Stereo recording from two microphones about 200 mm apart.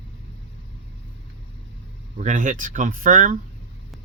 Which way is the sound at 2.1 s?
40° right (ahead or behind).